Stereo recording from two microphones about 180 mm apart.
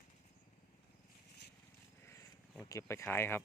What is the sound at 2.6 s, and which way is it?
Speech, 15° left (ahead or behind).